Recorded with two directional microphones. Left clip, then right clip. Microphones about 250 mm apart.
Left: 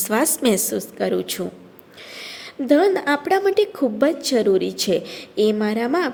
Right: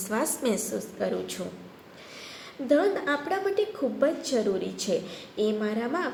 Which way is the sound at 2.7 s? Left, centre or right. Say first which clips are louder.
Left 7 dB; left.